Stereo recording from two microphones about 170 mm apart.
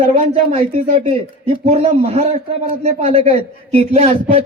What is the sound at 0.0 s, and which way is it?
A man's voice, 45° right (ahead or behind).